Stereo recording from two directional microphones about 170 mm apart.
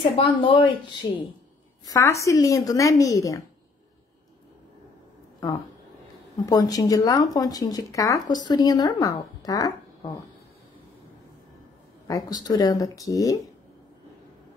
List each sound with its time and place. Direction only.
0.0 s speech: 30° left (ahead or behind)
6.4 s speech: 20° left (ahead or behind)
12.1 s speech: 20° left (ahead or behind)